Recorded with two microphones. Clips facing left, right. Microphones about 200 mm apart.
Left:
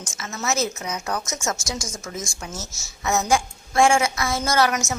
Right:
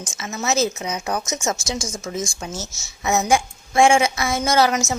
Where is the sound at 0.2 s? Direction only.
20° right (ahead or behind).